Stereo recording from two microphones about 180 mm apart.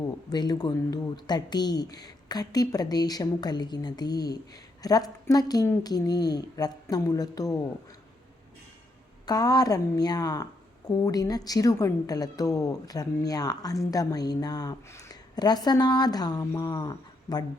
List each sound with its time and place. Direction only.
0.3 s a woman's voice: 20° left (ahead or behind)
9.2 s a woman's voice: 20° left (ahead or behind)